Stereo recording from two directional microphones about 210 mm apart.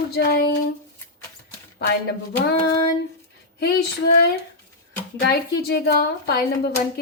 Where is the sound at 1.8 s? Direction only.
50° left (ahead or behind).